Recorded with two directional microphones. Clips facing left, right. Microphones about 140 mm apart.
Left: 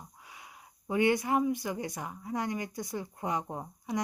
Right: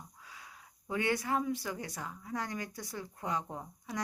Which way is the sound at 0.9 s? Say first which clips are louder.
Left 5 dB; 15° left (ahead or behind).